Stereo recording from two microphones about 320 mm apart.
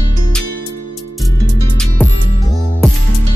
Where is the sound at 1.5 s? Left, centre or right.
Centre.